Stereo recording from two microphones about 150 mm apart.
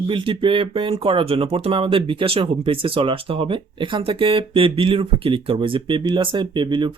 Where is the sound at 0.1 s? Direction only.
35° right (ahead or behind).